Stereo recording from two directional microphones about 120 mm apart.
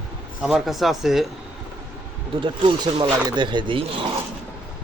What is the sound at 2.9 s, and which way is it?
Speech, 40° right (ahead or behind).